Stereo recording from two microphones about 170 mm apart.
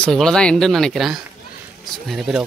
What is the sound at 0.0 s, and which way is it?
Speech, 5° left (ahead or behind).